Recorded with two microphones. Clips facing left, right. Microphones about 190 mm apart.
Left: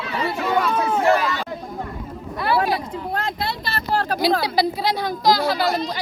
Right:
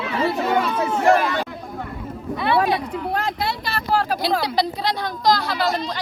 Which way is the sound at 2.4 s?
Centre (ahead or behind).